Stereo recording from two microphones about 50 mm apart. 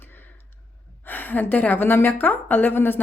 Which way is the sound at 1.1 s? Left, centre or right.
Left.